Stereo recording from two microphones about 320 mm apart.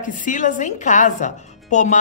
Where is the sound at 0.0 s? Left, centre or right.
Left.